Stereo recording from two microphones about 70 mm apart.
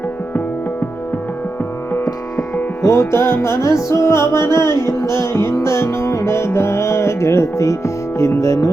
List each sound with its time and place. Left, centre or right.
2.8 s music: left